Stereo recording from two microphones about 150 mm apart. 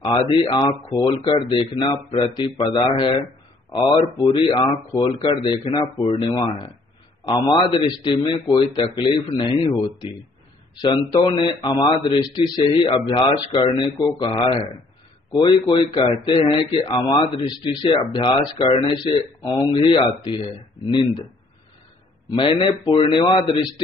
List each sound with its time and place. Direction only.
0.6 s a man's voice: 25° left (ahead or behind)
16.8 s speech: 20° left (ahead or behind)
17.8 s a man's voice: 35° left (ahead or behind)
22.3 s a man's voice: 35° left (ahead or behind)